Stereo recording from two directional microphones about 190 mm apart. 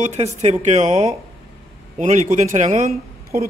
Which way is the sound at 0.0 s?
40° right (ahead or behind).